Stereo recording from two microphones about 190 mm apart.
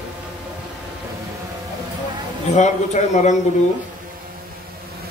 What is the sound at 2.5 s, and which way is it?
Speech, 40° left (ahead or behind).